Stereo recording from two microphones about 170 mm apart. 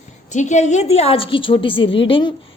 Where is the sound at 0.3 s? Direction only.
45° left (ahead or behind).